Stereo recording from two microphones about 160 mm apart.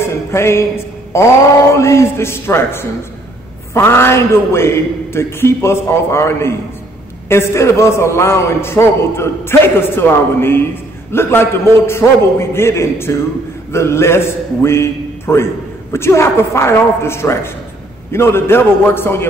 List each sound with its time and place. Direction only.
0.0 s music: 15° left (ahead or behind)
1.1 s a man's voice: 15° left (ahead or behind)